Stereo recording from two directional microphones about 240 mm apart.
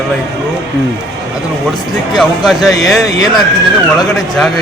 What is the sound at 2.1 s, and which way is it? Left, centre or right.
Speech, centre.